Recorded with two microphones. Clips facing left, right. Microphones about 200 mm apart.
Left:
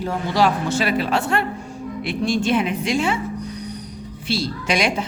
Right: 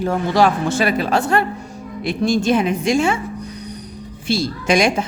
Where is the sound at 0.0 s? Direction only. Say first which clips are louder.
Right 3 dB; 50° right (ahead or behind).